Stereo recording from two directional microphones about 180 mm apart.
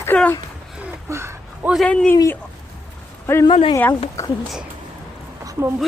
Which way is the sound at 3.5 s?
30° left (ahead or behind).